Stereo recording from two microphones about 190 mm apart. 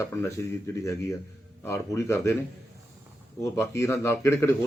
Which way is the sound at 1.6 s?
15° left (ahead or behind).